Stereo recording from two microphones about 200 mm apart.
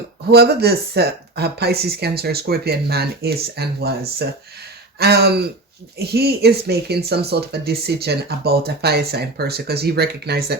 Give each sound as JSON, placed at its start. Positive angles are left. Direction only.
{"t": 0.3, "sound": "speech", "side_deg": -55}